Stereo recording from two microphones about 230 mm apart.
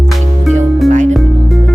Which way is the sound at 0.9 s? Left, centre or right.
Right.